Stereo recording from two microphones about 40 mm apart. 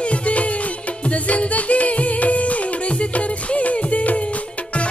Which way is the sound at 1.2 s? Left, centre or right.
Left.